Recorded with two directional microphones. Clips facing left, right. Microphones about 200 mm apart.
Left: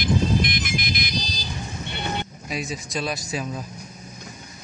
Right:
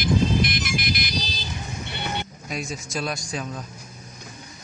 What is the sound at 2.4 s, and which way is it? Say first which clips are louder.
A man's voice: left 1 dB; centre (ahead or behind).